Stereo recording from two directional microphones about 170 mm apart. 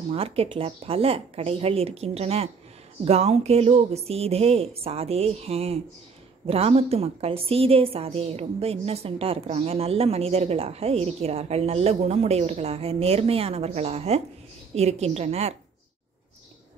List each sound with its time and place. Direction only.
0.1 s a woman's voice: 35° right (ahead or behind)